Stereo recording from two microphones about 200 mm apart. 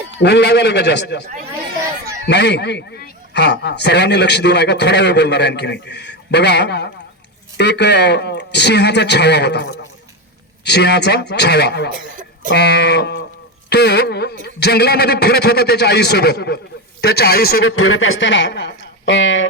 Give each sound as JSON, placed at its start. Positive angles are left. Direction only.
{"t": 0.2, "sound": "a man's voice", "side_deg": 60}
{"t": 11.9, "sound": "cough", "side_deg": -40}
{"t": 12.5, "sound": "a man's voice", "side_deg": 55}
{"t": 17.6, "sound": "speech", "side_deg": 90}